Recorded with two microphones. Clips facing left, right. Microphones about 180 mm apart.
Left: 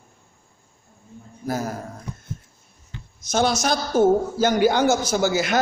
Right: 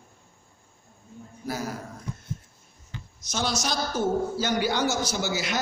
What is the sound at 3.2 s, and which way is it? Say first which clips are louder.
A man's voice: left 8 dB; 50° left (ahead or behind).